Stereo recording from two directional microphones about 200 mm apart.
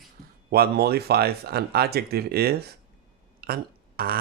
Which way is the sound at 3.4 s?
50° right (ahead or behind).